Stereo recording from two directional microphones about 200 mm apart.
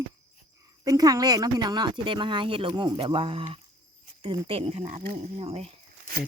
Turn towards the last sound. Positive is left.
turn(degrees=-30)  # may be behind; listen again after turning